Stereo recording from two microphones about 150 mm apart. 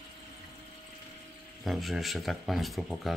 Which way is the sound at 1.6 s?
Centre (ahead or behind).